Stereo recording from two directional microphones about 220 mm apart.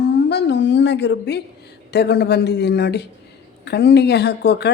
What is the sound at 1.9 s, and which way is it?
A woman's voice, 50° left (ahead or behind).